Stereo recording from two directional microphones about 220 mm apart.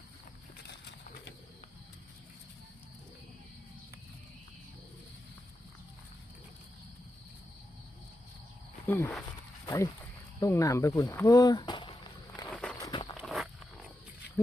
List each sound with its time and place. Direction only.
8.9 s speech: 10° left (ahead or behind)
12.5 s walk: 5° left (ahead or behind)
12.9 s walk: 20° left (ahead or behind)
13.2 s wild animals: centre (ahead or behind)